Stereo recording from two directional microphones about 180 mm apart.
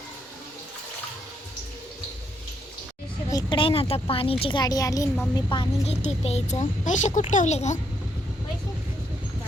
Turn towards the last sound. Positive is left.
turn(degrees=40)  # may be behind; listen again after turning